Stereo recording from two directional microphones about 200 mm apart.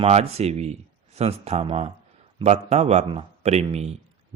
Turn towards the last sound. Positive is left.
turn(degrees=-30)  # may be behind; listen again after turning